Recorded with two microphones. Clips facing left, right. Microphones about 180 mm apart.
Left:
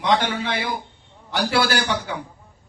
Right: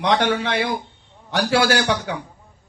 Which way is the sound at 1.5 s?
75° right (ahead or behind).